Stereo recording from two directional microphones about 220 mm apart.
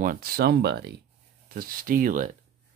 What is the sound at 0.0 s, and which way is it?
Speech, 40° right (ahead or behind).